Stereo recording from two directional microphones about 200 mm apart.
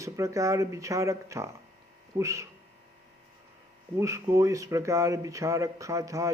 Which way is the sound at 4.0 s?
15° right (ahead or behind).